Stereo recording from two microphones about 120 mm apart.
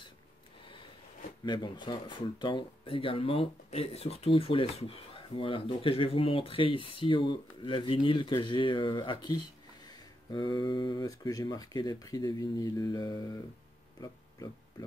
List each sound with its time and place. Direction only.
1.4 s speech: 40° left (ahead or behind)